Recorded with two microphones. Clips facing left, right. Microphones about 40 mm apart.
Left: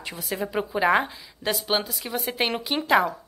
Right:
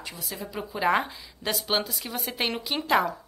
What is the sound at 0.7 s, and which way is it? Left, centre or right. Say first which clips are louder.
A woman's voice: left 2 dB; centre.